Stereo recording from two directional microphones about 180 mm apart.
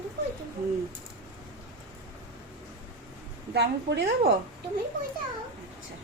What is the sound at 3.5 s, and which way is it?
Speech, 70° right (ahead or behind).